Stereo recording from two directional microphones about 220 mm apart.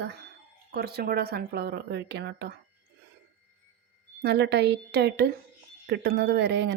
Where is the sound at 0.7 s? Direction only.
45° right (ahead or behind).